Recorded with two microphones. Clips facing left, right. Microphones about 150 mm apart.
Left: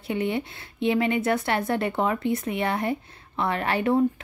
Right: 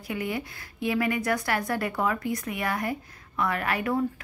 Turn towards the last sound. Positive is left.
turn(degrees=25)  # may be behind; listen again after turning